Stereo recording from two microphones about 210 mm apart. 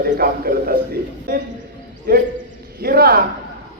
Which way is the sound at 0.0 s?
45° right (ahead or behind).